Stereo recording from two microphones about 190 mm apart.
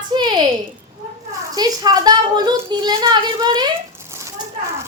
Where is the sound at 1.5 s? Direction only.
20° right (ahead or behind).